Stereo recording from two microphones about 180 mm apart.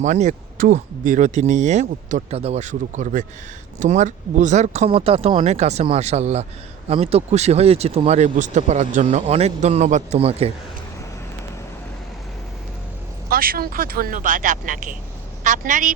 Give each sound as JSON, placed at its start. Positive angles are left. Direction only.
{"t": 0.0, "sound": "speech", "side_deg": -40}
{"t": 13.3, "sound": "a woman's voice", "side_deg": -55}